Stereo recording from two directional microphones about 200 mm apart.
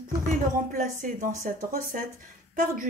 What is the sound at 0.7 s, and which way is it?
A woman's voice, 40° right (ahead or behind).